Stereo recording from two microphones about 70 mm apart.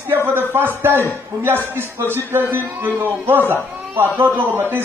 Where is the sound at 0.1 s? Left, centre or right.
Right.